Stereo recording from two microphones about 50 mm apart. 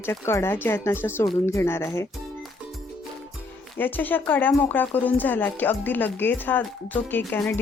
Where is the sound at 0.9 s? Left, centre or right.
Left.